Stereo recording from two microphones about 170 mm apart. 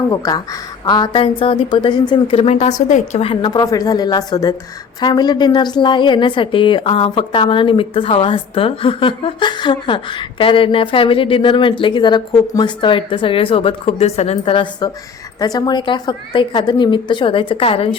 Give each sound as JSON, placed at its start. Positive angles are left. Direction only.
{"t": 0.1, "sound": "a woman's voice", "side_deg": 20}